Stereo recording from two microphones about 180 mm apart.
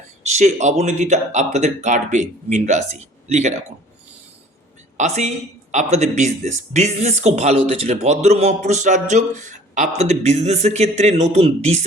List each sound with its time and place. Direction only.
0.2 s speech: 40° right (ahead or behind)
4.9 s speech: 40° right (ahead or behind)